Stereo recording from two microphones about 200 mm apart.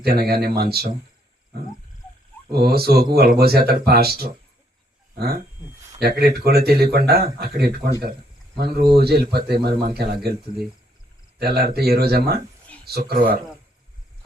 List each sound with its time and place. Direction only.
0.0 s speech: 50° right (ahead or behind)
2.5 s speech: 50° right (ahead or behind)
6.0 s speech: 50° right (ahead or behind)
11.3 s speech: 50° right (ahead or behind)